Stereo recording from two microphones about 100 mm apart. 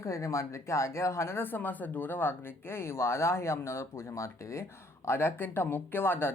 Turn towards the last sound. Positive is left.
turn(degrees=20)  # may be behind; listen again after turning